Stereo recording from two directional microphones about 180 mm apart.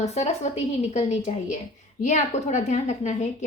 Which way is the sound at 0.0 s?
35° left (ahead or behind).